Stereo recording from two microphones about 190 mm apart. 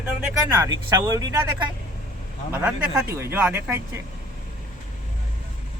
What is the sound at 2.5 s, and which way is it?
Speech, 10° right (ahead or behind).